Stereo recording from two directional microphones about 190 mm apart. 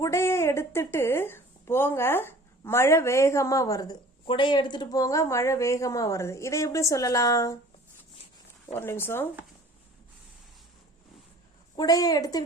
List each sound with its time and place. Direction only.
0.0 s speech: 15° left (ahead or behind)
8.7 s speech: 10° left (ahead or behind)
11.8 s a woman's voice: 20° left (ahead or behind)